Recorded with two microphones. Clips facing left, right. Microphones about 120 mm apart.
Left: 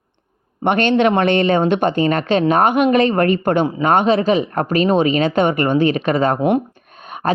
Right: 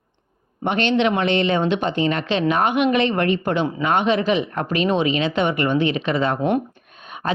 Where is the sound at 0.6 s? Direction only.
55° left (ahead or behind).